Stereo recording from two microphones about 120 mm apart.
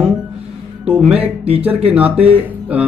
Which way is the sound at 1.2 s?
55° right (ahead or behind).